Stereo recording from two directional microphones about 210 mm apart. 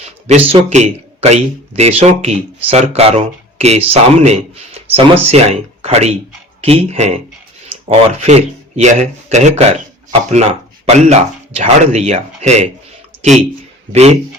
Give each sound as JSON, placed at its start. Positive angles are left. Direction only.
{"t": 0.0, "sound": "speech", "side_deg": -30}
{"t": 10.8, "sound": "speech", "side_deg": -30}
{"t": 13.9, "sound": "speech", "side_deg": -30}